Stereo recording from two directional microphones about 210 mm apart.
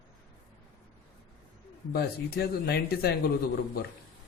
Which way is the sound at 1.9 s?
50° left (ahead or behind).